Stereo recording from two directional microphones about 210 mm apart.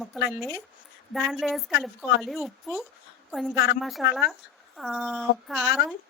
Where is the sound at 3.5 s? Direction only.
50° left (ahead or behind).